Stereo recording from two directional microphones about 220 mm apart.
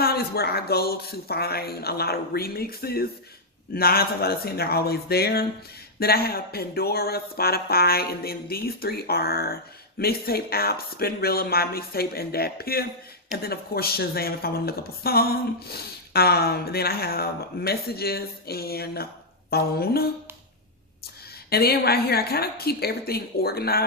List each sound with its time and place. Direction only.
0.0 s speech: 45° left (ahead or behind)
21.5 s speech: 45° left (ahead or behind)